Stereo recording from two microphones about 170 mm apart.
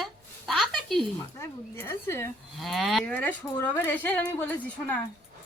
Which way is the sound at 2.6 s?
Centre (ahead or behind).